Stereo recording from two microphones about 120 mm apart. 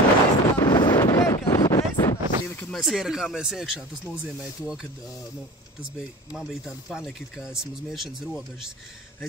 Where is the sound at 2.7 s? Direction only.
5° right (ahead or behind).